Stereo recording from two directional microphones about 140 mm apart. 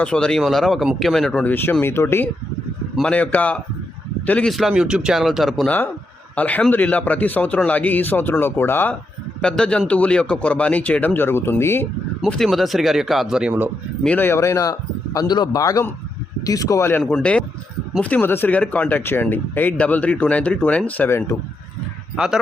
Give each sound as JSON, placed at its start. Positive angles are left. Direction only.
{"t": 0.0, "sound": "speech", "side_deg": 5}
{"t": 12.2, "sound": "speech", "side_deg": 0}
{"t": 14.0, "sound": "a man's voice", "side_deg": 10}
{"t": 17.0, "sound": "speech", "side_deg": 5}
{"t": 22.1, "sound": "speech", "side_deg": -5}